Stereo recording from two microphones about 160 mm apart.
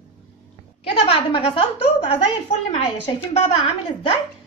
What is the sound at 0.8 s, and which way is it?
A woman's voice, 35° left (ahead or behind).